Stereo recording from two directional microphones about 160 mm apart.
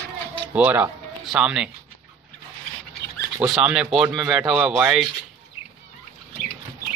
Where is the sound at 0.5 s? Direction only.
10° right (ahead or behind).